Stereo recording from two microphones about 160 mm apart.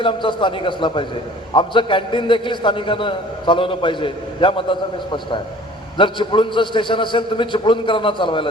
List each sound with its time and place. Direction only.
0.0 s a man's voice: 30° left (ahead or behind)